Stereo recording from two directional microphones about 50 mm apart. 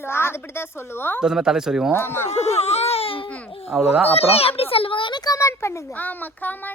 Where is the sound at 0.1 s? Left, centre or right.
Left.